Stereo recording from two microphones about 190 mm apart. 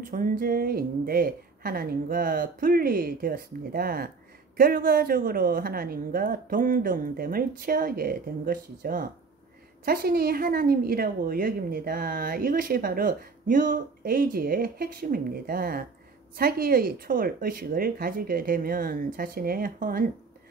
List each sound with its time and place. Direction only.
0.0 s a woman's voice: 45° right (ahead or behind)